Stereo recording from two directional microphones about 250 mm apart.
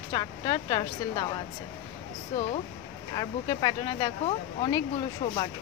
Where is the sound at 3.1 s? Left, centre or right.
Centre.